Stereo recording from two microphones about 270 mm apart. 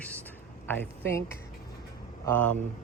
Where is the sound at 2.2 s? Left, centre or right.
Centre.